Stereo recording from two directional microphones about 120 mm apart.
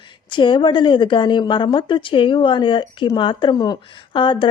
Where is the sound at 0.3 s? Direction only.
40° left (ahead or behind).